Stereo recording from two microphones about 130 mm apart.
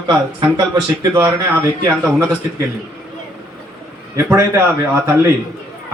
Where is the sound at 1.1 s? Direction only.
20° right (ahead or behind).